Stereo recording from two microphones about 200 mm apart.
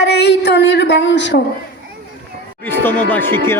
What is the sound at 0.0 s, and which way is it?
A woman's voice, 60° left (ahead or behind).